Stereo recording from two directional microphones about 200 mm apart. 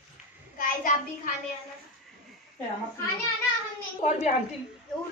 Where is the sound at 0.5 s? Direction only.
45° left (ahead or behind).